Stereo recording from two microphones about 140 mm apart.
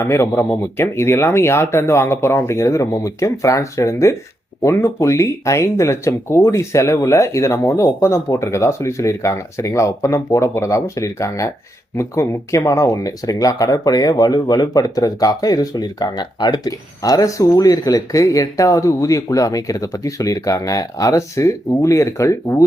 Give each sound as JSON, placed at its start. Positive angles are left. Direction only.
{"t": 0.0, "sound": "speech", "side_deg": 20}